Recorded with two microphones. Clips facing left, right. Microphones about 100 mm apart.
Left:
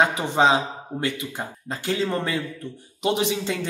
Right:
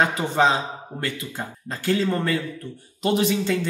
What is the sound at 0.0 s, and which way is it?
Speech, 20° left (ahead or behind).